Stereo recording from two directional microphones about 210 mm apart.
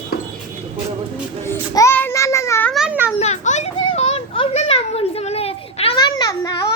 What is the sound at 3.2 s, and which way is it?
Children playing, 30° left (ahead or behind).